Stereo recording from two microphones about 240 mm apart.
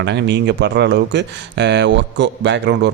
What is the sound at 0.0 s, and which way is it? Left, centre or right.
Speech, right.